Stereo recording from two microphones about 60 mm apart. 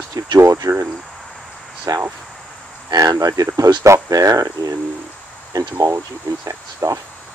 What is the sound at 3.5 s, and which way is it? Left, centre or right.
Speech, right.